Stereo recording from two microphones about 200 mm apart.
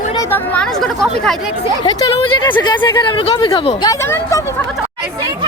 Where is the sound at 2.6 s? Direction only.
20° left (ahead or behind).